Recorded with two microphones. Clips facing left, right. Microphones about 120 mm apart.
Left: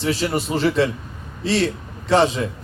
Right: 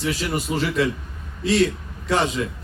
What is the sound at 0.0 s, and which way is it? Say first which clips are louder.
Speech: left 3 dB; 30° left (ahead or behind).